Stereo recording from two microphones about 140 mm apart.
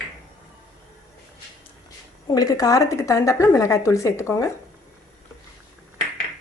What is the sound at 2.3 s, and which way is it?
Speech, 25° left (ahead or behind).